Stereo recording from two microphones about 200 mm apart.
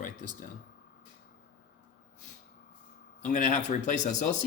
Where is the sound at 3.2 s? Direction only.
35° left (ahead or behind).